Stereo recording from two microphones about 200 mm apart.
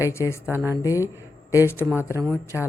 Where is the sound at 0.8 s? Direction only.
15° left (ahead or behind).